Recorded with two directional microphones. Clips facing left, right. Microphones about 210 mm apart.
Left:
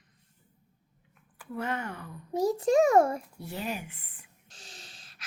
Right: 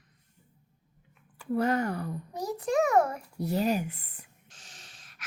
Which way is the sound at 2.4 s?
25° left (ahead or behind).